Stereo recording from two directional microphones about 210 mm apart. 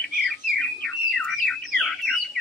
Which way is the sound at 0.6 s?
5° left (ahead or behind).